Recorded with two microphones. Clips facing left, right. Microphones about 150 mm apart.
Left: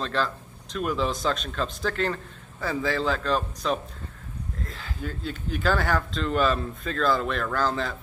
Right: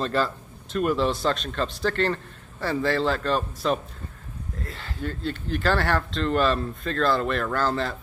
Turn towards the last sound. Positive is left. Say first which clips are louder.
# right 1 dB
turn(degrees=0)  # may be behind; listen again after turning